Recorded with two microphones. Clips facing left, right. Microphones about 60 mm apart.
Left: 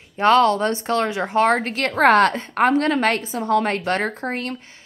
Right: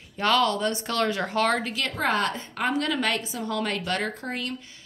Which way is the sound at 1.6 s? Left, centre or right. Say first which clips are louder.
Left 9 dB; left.